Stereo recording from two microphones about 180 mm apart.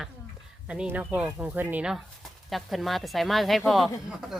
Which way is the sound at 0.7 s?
10° right (ahead or behind).